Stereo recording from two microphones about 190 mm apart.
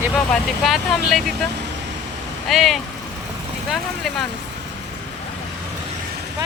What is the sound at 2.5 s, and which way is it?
Speech, centre (ahead or behind).